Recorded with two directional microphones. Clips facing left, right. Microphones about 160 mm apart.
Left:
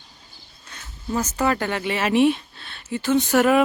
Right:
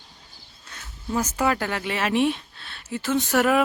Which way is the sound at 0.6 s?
Centre (ahead or behind).